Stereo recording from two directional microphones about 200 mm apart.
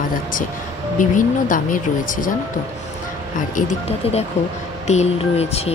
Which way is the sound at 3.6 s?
35° left (ahead or behind).